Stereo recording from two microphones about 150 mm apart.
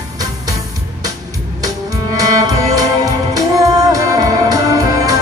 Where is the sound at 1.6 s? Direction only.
25° right (ahead or behind).